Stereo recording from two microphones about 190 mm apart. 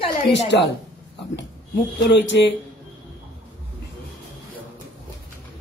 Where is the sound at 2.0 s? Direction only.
70° left (ahead or behind).